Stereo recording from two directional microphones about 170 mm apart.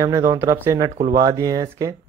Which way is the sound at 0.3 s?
20° right (ahead or behind).